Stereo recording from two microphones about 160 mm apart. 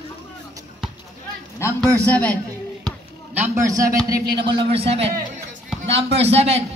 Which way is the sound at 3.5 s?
20° right (ahead or behind).